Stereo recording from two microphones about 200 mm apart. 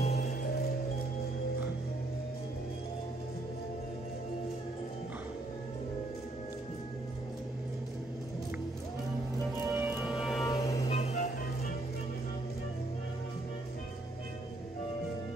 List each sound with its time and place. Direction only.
0.0 s music: 35° left (ahead or behind)
9.7 s music: 10° right (ahead or behind)
10.4 s music: 15° left (ahead or behind)
10.9 s music: 30° left (ahead or behind)